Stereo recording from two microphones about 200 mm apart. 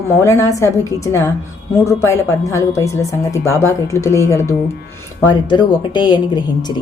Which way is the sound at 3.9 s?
15° left (ahead or behind).